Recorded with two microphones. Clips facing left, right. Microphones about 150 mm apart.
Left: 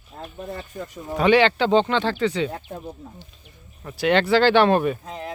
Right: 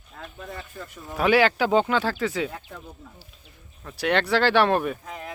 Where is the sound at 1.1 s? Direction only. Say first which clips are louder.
Left 3 dB; 5° right (ahead or behind).